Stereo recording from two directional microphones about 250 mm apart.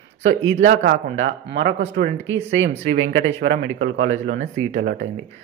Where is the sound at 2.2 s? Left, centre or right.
Right.